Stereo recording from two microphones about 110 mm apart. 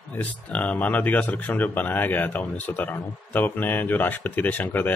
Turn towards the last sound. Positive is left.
turn(degrees=15)  # may be behind; listen again after turning